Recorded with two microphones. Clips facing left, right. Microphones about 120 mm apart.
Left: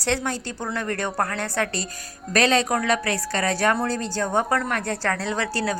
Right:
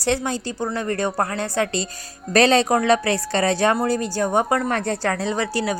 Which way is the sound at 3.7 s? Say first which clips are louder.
Right 4 dB; 10° right (ahead or behind).